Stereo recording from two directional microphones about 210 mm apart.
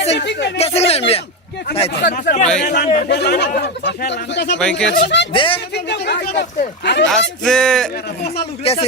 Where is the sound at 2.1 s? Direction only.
40° left (ahead or behind).